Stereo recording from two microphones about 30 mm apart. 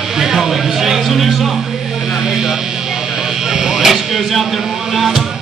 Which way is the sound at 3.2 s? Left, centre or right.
Centre.